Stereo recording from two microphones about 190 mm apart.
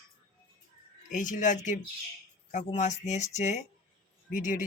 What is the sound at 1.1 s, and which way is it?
Speech, 40° left (ahead or behind).